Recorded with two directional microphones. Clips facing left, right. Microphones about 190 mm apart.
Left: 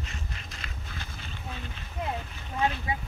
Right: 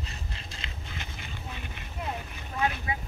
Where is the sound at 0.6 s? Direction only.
20° right (ahead or behind).